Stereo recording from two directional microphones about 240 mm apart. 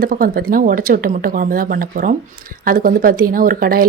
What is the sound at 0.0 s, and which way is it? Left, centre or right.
A woman's voice, right.